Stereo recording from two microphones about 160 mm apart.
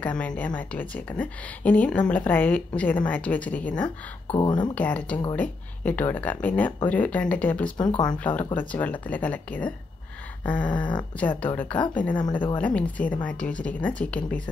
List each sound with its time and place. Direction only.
0.0 s a woman's voice: 10° left (ahead or behind)
3.8 s speech: 25° left (ahead or behind)
4.7 s a woman's voice: 10° left (ahead or behind)
10.8 s speech: 30° left (ahead or behind)
11.1 s a woman's voice: 10° left (ahead or behind)